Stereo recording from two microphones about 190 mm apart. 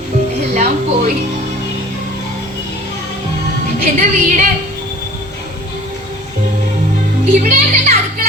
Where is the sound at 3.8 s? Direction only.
40° right (ahead or behind).